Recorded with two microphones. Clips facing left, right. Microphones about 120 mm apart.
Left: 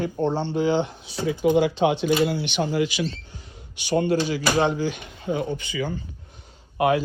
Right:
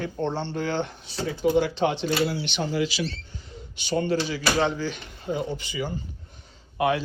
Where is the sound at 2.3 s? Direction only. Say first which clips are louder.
Left 4 dB; 55° left (ahead or behind).